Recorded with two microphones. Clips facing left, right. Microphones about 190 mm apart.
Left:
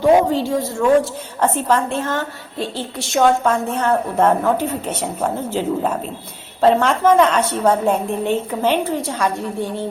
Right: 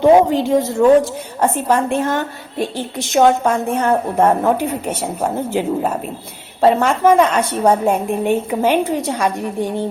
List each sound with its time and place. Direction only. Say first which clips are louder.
0.0 s a woman's voice: right 3 dB; 20° right (ahead or behind)